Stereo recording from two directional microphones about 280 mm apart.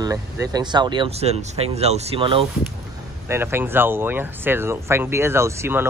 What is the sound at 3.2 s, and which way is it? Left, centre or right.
Speech, centre.